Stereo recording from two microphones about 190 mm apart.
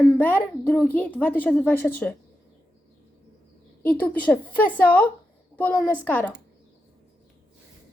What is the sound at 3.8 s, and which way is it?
A woman's voice, 10° left (ahead or behind).